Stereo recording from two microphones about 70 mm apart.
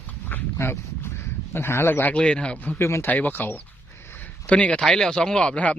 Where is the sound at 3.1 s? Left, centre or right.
Left.